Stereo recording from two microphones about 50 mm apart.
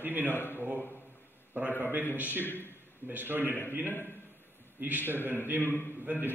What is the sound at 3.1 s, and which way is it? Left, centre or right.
A man's voice, right.